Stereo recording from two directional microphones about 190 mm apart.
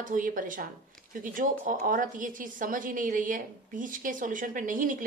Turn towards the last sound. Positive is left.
turn(degrees=-45)  # may be behind; listen again after turning